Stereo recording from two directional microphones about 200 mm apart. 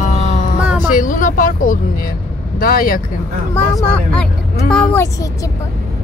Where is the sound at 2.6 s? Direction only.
45° left (ahead or behind).